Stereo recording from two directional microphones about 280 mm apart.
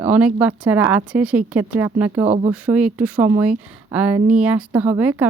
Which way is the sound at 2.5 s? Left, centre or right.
Centre.